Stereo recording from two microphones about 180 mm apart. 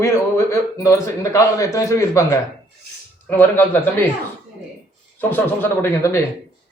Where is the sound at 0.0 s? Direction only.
15° left (ahead or behind).